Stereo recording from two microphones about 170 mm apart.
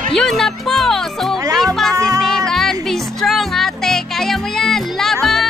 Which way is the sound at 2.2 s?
Centre (ahead or behind).